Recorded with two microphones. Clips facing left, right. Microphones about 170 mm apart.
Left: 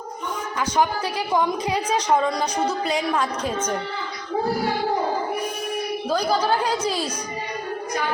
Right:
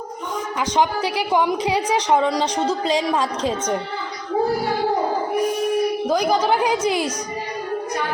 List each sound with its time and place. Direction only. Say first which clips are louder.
0.6 s a woman's voice: right 2 dB; 15° right (ahead or behind)
6.1 s a woman's voice: even; 15° right (ahead or behind)